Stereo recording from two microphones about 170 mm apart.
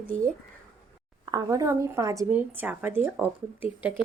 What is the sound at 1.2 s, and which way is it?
A woman's voice, 25° right (ahead or behind).